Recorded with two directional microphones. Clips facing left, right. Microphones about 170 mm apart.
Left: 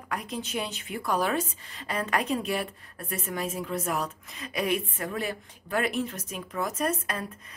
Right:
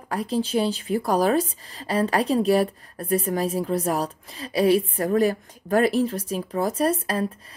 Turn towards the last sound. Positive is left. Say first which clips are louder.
# right 7 dB
turn(degrees=-35)  # may be behind; listen again after turning